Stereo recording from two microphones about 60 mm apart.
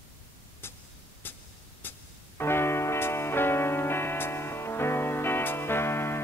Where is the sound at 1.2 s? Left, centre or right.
Left.